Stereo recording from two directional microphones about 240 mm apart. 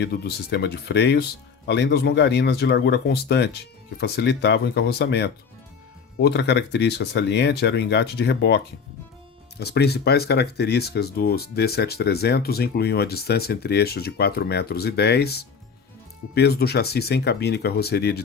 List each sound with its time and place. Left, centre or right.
0.0 s speech: left